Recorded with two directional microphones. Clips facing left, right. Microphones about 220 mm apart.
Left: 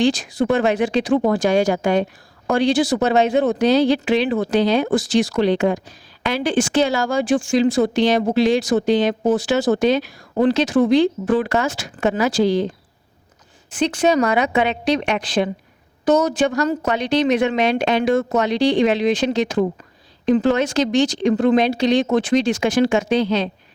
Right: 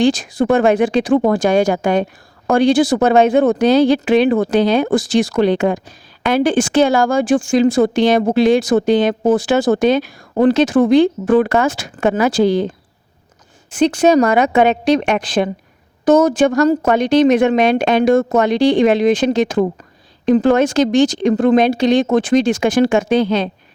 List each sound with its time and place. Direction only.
0.0 s speech: 50° right (ahead or behind)
13.7 s speech: 45° right (ahead or behind)